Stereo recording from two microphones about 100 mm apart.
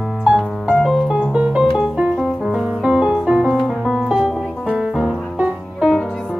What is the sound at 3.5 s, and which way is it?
Music, centre (ahead or behind).